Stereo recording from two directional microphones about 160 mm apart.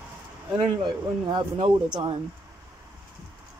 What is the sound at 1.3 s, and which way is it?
Speech, 30° right (ahead or behind).